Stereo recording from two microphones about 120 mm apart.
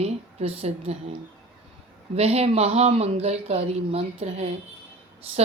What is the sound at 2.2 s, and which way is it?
Speech, 60° right (ahead or behind).